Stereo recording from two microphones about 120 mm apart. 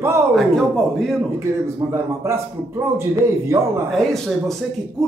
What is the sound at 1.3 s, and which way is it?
A man's voice, 25° right (ahead or behind).